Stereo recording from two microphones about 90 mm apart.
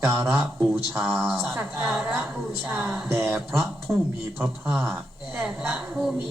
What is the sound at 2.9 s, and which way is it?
Speech, centre (ahead or behind).